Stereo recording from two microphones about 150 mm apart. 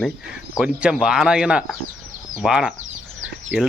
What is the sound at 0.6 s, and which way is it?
Speech, 5° right (ahead or behind).